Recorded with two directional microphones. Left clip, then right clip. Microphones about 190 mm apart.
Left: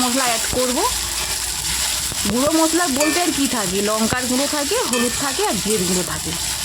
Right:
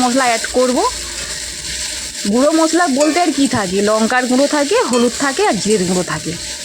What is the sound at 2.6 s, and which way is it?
Frying, 25° right (ahead or behind).